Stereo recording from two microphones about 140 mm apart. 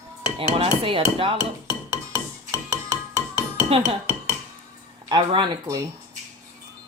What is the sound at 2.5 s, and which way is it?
Music, 25° right (ahead or behind).